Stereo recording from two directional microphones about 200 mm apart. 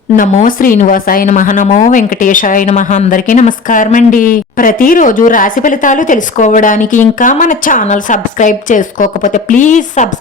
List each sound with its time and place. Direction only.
0.2 s a woman's voice: 40° left (ahead or behind)